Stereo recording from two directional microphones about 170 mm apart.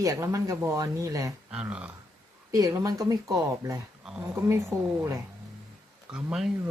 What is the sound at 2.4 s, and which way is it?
Speech, 20° right (ahead or behind).